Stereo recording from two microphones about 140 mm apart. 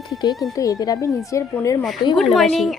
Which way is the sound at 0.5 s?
25° left (ahead or behind).